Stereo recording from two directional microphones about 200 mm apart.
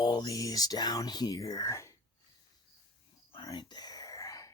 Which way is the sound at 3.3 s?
25° left (ahead or behind).